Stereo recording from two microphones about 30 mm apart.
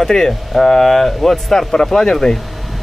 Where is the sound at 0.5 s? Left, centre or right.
Centre.